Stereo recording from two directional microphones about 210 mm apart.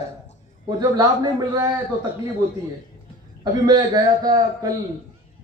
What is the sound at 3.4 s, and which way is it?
A man's voice, 20° right (ahead or behind).